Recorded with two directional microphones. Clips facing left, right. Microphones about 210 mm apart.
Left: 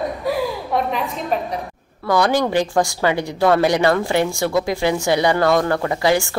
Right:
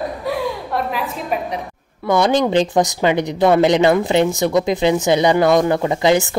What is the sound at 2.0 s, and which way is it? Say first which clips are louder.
Speech: right 2 dB; 20° right (ahead or behind).